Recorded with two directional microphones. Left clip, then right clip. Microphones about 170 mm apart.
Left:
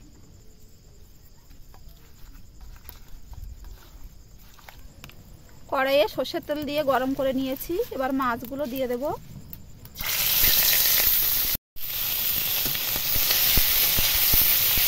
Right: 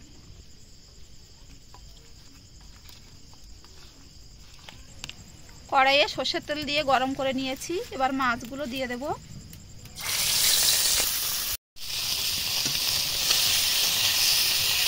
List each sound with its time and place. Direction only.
5.7 s speech: 85° left; by 9.1 s 70° left (ahead or behind)
10.0 s a sound: 15° left (ahead or behind)
13.7 s steam: 25° left (ahead or behind)
14.2 s hiss: 15° left (ahead or behind)